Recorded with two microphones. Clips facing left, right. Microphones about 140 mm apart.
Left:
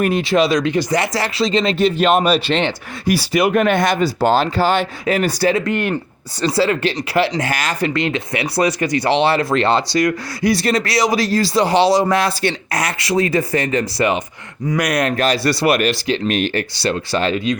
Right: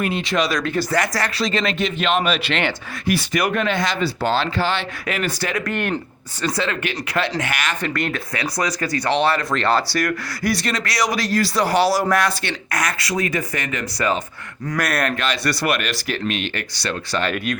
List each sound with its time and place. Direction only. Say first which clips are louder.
0.2 s speech: left 6 dB; 30° left (ahead or behind)
0.7 s speech: left 3 dB; 15° left (ahead or behind)
1.8 s speech: left 8 dB; 40° left (ahead or behind)
3.5 s speech: left 6 dB; 50° left (ahead or behind); by 7.9 s 35° left (ahead or behind)
7.9 s speech: left 5 dB; 20° left (ahead or behind)
14.7 s speech: left 4 dB; 15° left (ahead or behind)
15.1 s speech: left 6 dB; 35° left (ahead or behind)
16.0 s speech: left 5 dB; 25° left (ahead or behind)
16.3 s speech: left 7 dB; 40° left (ahead or behind)
16.7 s speech: left 5 dB; 30° left (ahead or behind)
17.3 s speech: left 5 dB; 60° right (ahead or behind)